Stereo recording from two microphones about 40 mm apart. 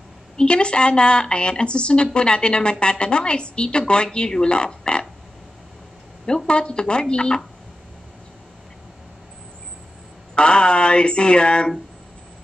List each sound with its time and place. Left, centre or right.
0.4 s a woman's voice: left
6.2 s a woman's voice: left
10.3 s speech: left